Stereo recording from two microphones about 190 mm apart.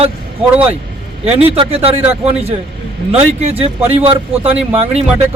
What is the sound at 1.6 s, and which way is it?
Speech, 30° right (ahead or behind).